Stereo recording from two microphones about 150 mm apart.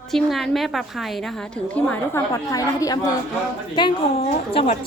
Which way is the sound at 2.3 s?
20° left (ahead or behind).